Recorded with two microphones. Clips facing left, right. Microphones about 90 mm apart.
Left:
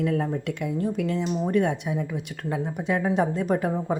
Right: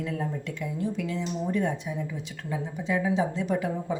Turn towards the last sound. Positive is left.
turn(degrees=50)  # may be behind; listen again after turning